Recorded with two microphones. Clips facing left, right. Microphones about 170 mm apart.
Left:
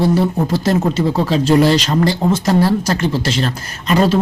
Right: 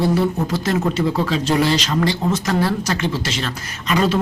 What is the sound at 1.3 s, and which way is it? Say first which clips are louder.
Speech: left 6 dB; 35° left (ahead or behind).